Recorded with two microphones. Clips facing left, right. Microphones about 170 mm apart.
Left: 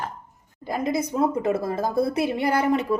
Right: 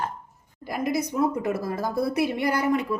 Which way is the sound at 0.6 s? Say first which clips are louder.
Left 1 dB; 25° left (ahead or behind).